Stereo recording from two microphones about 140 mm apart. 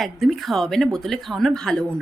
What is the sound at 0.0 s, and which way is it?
Speech, centre (ahead or behind).